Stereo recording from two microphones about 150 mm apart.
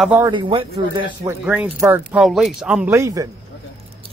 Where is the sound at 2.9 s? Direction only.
20° right (ahead or behind).